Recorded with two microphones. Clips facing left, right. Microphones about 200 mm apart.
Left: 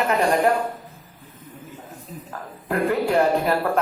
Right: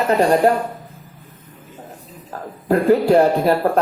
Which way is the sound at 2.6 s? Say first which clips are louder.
Right 7 dB; 35° right (ahead or behind).